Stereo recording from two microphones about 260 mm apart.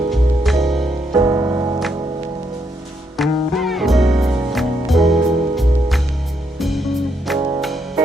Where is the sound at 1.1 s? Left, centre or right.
Centre.